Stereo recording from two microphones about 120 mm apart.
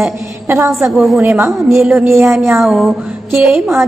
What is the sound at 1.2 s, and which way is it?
Speech, 20° right (ahead or behind).